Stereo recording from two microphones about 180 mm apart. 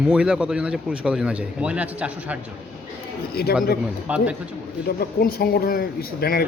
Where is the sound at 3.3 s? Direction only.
60° left (ahead or behind).